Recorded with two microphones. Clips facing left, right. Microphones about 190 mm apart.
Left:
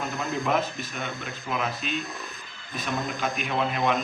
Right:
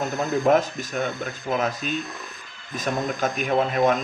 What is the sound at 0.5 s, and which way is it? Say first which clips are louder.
Speech: right 8 dB; 40° right (ahead or behind).